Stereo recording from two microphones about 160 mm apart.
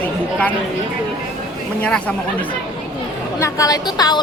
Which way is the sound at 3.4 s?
20° left (ahead or behind).